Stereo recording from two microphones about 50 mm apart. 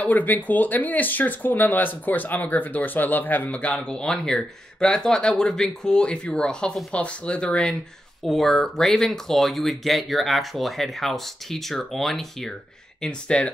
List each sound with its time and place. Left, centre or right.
0.0 s speech: left
8.3 s speech: centre
13.0 s speech: centre